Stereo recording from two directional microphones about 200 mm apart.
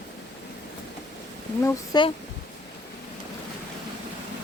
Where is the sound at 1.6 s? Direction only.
25° left (ahead or behind).